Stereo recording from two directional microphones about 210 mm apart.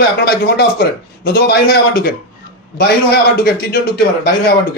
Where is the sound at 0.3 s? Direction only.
50° left (ahead or behind).